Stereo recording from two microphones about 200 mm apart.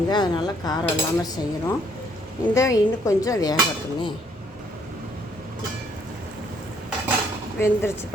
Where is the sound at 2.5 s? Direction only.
15° left (ahead or behind).